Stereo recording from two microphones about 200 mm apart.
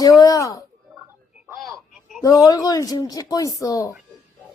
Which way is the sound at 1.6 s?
Centre (ahead or behind).